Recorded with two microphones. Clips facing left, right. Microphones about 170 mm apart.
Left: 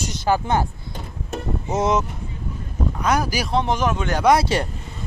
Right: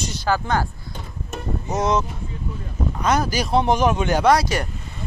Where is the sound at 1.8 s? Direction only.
20° left (ahead or behind).